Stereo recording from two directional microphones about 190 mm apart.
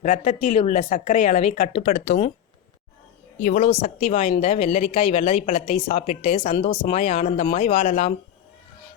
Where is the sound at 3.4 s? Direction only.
40° left (ahead or behind).